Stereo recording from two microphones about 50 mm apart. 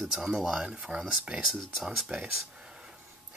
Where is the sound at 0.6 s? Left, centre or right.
Centre.